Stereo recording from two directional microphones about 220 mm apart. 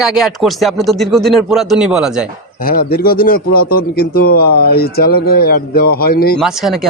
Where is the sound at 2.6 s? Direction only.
40° left (ahead or behind).